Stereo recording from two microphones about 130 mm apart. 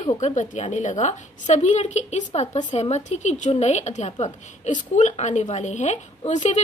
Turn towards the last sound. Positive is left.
turn(degrees=65)  # may be behind; listen again after turning